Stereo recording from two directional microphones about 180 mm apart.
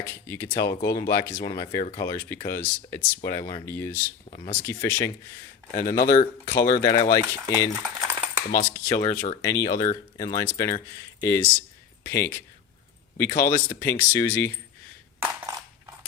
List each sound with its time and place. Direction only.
0.0 s speech: 15° left (ahead or behind)
5.7 s speech: 50° left (ahead or behind)
6.7 s speech: 20° left (ahead or behind)
7.8 s a sound: 10° right (ahead or behind)
8.5 s speech: 15° left (ahead or behind)
15.2 s coin: 20° right (ahead or behind)